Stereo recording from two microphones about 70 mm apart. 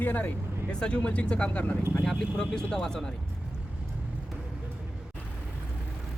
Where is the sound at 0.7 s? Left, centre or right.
Centre.